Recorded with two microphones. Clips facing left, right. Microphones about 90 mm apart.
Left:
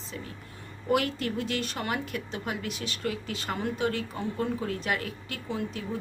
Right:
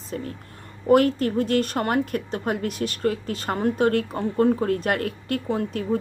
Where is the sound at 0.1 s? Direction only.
45° right (ahead or behind).